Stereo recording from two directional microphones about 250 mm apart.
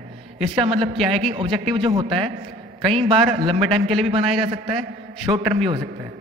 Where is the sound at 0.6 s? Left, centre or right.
Centre.